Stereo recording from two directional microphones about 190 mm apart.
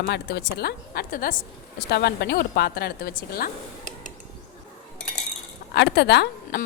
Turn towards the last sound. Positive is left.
turn(degrees=60)  # may be behind; listen again after turning